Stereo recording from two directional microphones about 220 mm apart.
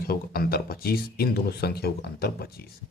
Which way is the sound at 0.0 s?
45° left (ahead or behind).